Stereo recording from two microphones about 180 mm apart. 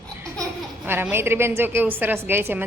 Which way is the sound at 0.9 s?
10° right (ahead or behind).